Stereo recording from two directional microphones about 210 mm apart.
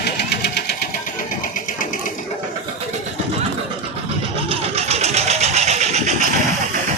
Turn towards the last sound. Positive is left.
turn(degrees=-30)  # may be behind; listen again after turning